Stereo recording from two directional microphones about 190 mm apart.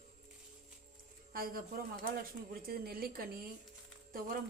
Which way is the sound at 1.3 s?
50° right (ahead or behind).